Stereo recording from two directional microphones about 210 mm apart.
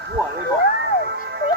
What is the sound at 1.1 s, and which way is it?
Music, 55° right (ahead or behind).